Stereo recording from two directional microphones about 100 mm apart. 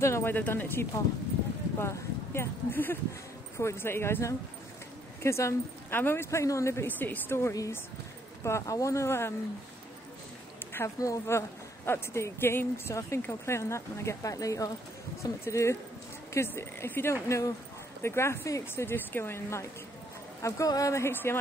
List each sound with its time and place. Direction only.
0.0 s speech: 25° left (ahead or behind)
10.7 s speech: 30° left (ahead or behind)
20.4 s speech: 35° left (ahead or behind)